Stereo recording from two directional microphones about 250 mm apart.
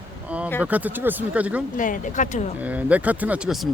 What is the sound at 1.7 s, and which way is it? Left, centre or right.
Speech, left.